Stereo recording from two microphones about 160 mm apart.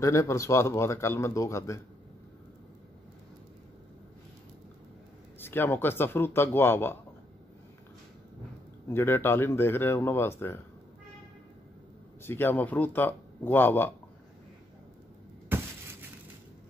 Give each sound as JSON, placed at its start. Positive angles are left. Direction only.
{"t": 0.0, "sound": "speech", "side_deg": 20}
{"t": 5.4, "sound": "speech", "side_deg": 15}
{"t": 8.8, "sound": "speech", "side_deg": 15}
{"t": 12.2, "sound": "speech", "side_deg": 15}